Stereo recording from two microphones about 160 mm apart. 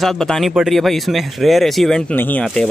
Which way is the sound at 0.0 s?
Centre (ahead or behind).